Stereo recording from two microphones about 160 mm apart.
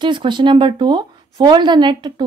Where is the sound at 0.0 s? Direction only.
30° right (ahead or behind).